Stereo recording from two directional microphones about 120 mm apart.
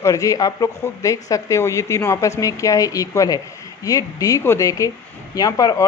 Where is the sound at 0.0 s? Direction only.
30° left (ahead or behind).